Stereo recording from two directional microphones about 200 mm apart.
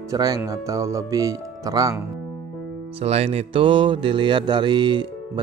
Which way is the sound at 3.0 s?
30° right (ahead or behind).